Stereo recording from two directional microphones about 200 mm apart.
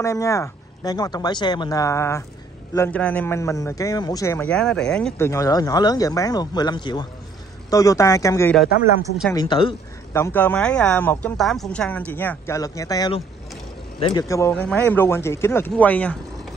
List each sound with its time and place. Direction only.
0.0 s speech: 15° left (ahead or behind)
5.1 s speech: 15° left (ahead or behind)
10.1 s speech: 10° left (ahead or behind); by 14.2 s 25° left (ahead or behind)
14.2 s speech: 15° left (ahead or behind)